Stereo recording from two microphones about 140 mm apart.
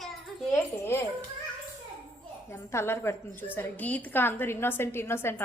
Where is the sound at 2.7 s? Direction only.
20° left (ahead or behind).